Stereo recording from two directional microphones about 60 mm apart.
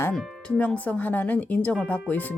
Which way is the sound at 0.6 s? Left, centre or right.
Left.